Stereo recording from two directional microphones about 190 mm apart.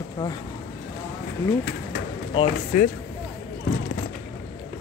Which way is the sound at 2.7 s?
45° left (ahead or behind).